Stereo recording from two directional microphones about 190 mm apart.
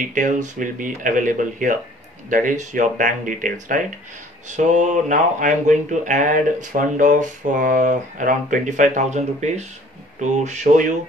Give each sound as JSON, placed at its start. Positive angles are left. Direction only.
{"t": 0.1, "sound": "speech", "side_deg": -40}